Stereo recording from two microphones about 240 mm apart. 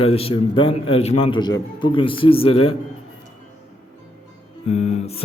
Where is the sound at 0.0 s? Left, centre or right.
Left.